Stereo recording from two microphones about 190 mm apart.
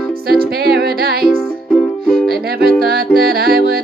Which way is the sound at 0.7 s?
55° right (ahead or behind).